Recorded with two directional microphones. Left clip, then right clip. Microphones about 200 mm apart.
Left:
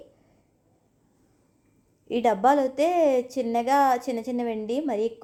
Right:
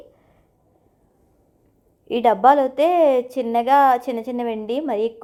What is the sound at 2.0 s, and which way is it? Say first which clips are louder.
A woman's voice: right 6 dB; 15° right (ahead or behind).